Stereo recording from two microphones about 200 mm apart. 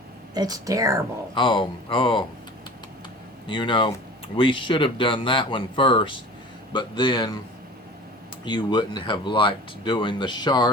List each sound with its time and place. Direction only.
0.3 s speech: 20° right (ahead or behind)
1.4 s speech: 25° left (ahead or behind)
3.4 s speech: 25° left (ahead or behind)
8.4 s speech: 20° left (ahead or behind)